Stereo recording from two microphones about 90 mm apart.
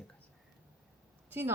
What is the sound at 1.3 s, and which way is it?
Speech, 25° right (ahead or behind).